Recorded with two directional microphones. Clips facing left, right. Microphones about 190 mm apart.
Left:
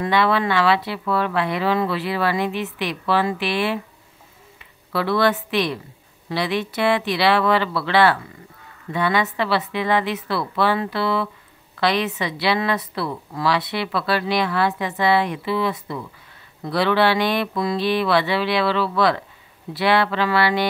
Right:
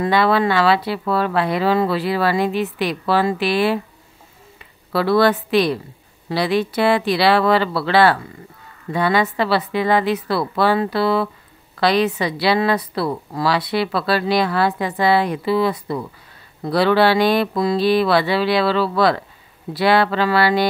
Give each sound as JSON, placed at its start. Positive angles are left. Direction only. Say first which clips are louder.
{"t": 0.0, "sound": "a woman's voice", "louder": "right 3 dB", "side_deg": -35}